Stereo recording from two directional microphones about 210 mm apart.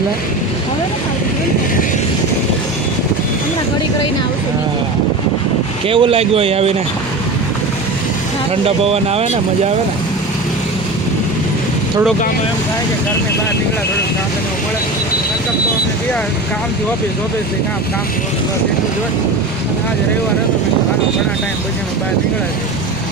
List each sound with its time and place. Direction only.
5.9 s speech: 25° right (ahead or behind)
8.6 s speech: 30° right (ahead or behind)